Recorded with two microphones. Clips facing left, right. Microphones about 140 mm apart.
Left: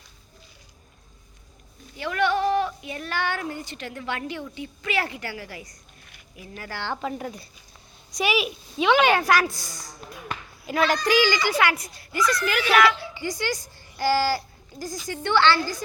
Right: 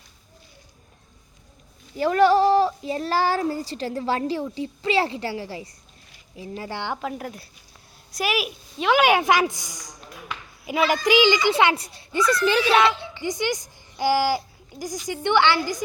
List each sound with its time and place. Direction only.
2.0 s child singing: 35° right (ahead or behind)
6.3 s a child's voice: 25° right (ahead or behind)
6.9 s a woman's voice: centre (ahead or behind)
10.7 s a child's voice: 5° right (ahead or behind)